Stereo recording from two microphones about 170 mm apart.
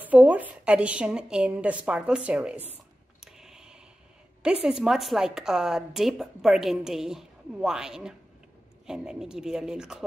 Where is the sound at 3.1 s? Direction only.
5° right (ahead or behind).